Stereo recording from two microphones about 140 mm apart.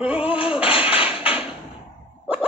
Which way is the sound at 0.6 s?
10° right (ahead or behind).